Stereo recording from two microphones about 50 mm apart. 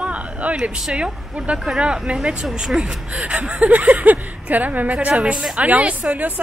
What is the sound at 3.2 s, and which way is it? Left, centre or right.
A woman's voice, right.